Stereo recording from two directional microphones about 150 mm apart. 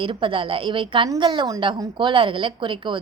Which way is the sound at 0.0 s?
35° right (ahead or behind).